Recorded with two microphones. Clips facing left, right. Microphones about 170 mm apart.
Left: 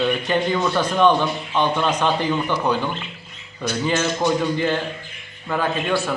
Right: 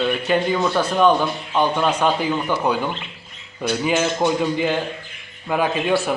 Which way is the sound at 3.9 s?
15° right (ahead or behind).